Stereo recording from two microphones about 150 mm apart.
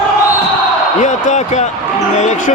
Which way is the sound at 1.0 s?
50° left (ahead or behind).